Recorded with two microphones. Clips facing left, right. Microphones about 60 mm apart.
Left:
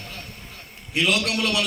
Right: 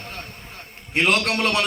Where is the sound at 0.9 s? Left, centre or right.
Right.